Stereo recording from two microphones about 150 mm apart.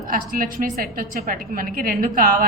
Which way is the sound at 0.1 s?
65° right (ahead or behind).